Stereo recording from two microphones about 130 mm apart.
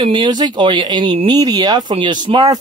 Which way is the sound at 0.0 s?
35° right (ahead or behind).